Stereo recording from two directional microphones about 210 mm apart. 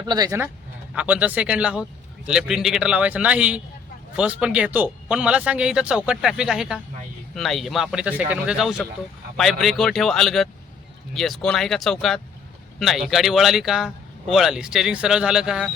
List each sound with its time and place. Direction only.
0.1 s speech: 15° right (ahead or behind)